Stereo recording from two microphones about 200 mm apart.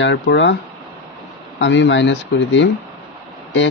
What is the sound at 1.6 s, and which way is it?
Speech, 65° left (ahead or behind).